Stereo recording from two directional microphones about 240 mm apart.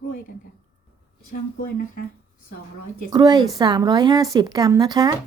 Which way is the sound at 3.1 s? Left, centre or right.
Centre.